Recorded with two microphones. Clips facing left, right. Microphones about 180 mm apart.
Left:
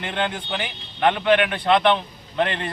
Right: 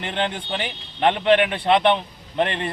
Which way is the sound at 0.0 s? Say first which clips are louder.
Even; 30° right (ahead or behind).